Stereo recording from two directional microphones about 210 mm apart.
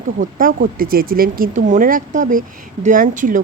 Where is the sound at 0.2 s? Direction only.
40° right (ahead or behind).